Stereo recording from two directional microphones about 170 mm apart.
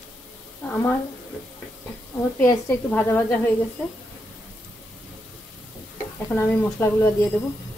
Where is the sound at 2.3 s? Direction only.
10° left (ahead or behind).